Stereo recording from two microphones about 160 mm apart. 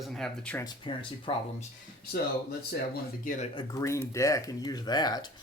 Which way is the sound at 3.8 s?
20° left (ahead or behind).